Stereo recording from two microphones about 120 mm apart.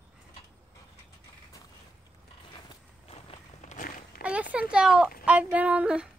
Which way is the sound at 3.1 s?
65° left (ahead or behind).